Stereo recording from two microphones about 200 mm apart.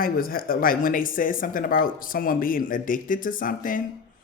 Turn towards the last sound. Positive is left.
turn(degrees=40)  # may be behind; listen again after turning